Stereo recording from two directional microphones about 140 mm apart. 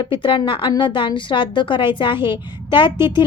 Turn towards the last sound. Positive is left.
turn(degrees=35)  # may be behind; listen again after turning